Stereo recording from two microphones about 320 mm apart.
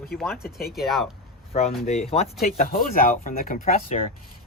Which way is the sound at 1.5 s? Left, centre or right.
Centre.